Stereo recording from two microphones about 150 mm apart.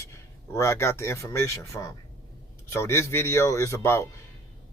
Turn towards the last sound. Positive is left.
turn(degrees=20)  # may be behind; listen again after turning